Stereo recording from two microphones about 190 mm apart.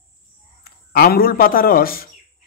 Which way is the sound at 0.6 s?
55° left (ahead or behind).